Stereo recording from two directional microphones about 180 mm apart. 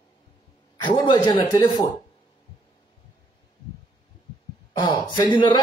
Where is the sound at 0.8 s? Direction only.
25° left (ahead or behind).